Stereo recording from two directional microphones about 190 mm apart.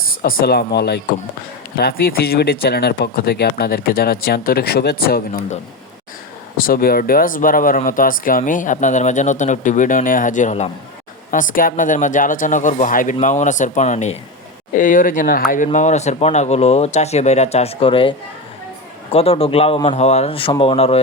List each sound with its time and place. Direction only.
0.2 s speech: 50° left (ahead or behind)
6.6 s speech: 50° left (ahead or behind); by 18.1 s 30° left (ahead or behind)
19.1 s speech: 30° left (ahead or behind)